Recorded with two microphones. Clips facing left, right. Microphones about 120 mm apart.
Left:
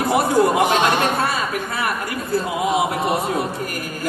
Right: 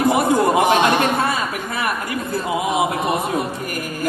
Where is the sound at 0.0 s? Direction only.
20° right (ahead or behind).